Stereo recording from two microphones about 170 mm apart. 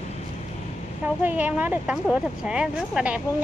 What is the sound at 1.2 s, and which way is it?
Speech, 10° right (ahead or behind).